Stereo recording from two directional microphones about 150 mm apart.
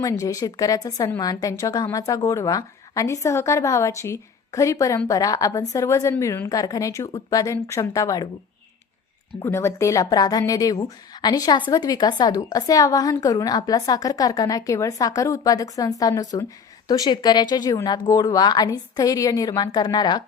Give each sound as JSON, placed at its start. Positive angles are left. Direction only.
{"t": 0.0, "sound": "a woman's voice", "side_deg": 20}
{"t": 9.4, "sound": "a woman's voice", "side_deg": 15}